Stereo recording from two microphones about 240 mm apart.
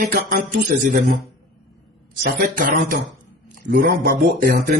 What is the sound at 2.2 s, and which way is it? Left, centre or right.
Speech, right.